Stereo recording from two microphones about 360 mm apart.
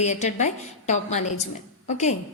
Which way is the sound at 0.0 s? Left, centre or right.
Centre.